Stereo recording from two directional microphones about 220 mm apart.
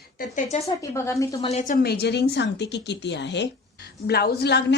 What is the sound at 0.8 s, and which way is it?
Speech, 15° left (ahead or behind).